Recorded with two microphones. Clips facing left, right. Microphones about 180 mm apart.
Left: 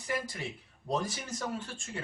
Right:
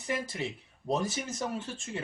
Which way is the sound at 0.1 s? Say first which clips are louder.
Right 2 dB; 25° right (ahead or behind).